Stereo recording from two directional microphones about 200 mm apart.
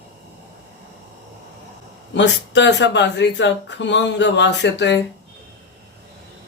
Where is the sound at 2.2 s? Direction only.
65° left (ahead or behind).